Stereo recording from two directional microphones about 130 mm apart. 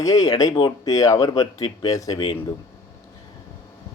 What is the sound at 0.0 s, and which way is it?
Speech, 25° left (ahead or behind).